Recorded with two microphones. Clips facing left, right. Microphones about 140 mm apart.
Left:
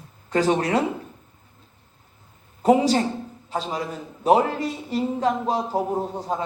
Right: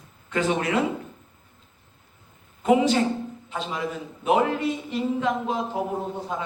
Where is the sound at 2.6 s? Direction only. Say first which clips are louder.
Left 2 dB; 40° left (ahead or behind).